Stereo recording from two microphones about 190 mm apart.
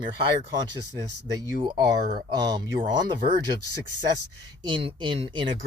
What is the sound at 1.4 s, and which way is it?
Speech, 20° right (ahead or behind).